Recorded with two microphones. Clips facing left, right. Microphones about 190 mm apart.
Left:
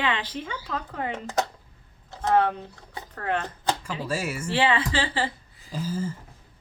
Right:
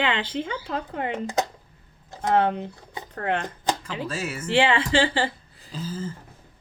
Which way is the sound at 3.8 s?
10° left (ahead or behind).